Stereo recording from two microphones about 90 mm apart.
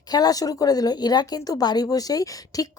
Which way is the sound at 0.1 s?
45° left (ahead or behind).